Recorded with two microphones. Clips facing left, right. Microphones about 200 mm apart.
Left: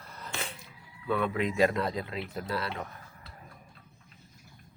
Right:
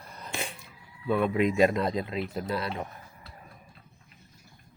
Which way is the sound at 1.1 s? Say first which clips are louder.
Right 4 dB; 15° right (ahead or behind).